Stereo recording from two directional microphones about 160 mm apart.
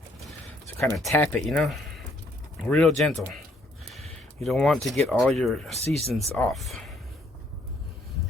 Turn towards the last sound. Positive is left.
turn(degrees=0)  # may be behind; listen again after turning